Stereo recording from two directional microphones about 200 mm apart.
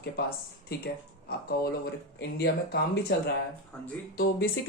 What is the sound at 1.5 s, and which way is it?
Speech, 50° left (ahead or behind).